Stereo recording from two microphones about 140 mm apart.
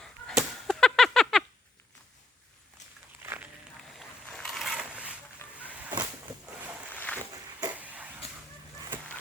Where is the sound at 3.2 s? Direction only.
15° right (ahead or behind).